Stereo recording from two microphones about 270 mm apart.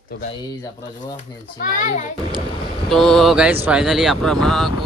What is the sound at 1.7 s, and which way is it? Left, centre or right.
Speech, left.